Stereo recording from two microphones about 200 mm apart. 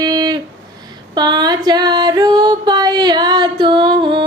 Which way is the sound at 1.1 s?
20° right (ahead or behind).